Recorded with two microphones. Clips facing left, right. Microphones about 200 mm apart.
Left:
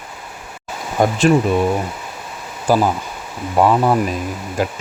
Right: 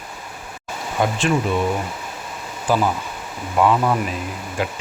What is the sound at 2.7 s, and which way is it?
Speech, 40° left (ahead or behind).